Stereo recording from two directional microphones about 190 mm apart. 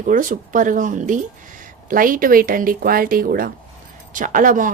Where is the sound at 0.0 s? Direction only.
45° right (ahead or behind).